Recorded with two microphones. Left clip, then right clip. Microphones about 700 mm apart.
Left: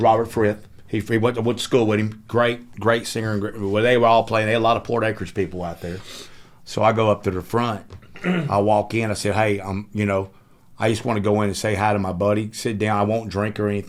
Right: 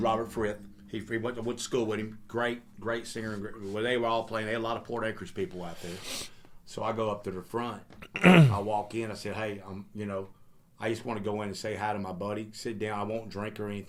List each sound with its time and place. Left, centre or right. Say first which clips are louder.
0.0 s speech: left 12 dB; left
6.7 s speech: left 14 dB; left
8.7 s speech: left 12 dB; left